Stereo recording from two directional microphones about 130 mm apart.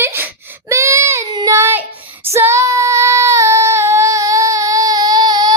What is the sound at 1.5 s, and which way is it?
Child singing, 20° right (ahead or behind).